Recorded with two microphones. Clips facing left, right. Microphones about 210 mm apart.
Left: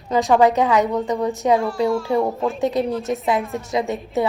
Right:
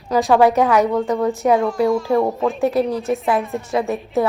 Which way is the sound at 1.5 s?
Centre (ahead or behind).